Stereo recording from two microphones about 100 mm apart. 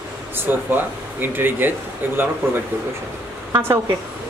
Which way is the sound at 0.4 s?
20° right (ahead or behind).